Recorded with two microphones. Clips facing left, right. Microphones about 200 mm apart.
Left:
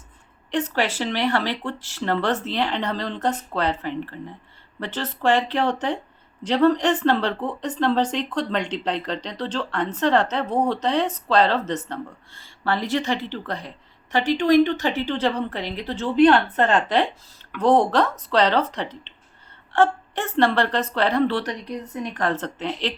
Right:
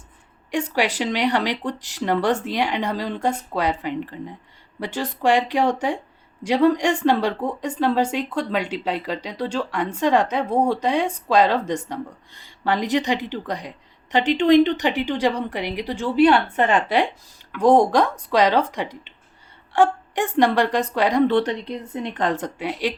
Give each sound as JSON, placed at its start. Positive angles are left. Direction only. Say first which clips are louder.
{"t": 0.5, "sound": "a woman's voice", "louder": "right 1 dB", "side_deg": -10}